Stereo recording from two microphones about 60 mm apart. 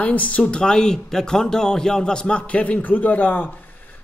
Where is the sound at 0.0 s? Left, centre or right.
Left.